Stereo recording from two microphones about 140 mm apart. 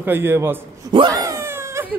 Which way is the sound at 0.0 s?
15° right (ahead or behind).